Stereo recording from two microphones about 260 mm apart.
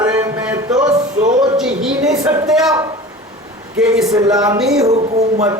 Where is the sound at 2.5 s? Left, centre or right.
Centre.